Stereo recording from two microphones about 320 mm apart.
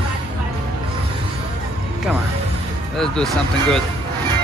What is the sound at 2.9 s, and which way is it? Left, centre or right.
Speech, centre.